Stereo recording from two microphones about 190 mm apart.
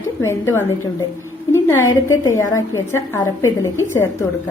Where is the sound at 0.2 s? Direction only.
15° left (ahead or behind).